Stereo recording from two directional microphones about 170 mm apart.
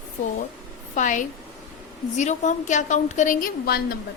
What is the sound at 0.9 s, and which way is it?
A woman's voice, 50° left (ahead or behind).